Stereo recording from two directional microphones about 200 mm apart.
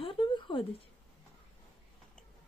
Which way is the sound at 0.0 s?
25° left (ahead or behind).